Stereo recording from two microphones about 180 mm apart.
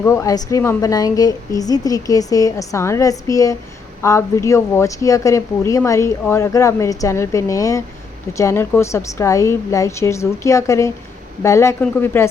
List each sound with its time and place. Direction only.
0.0 s a woman's voice: 15° left (ahead or behind)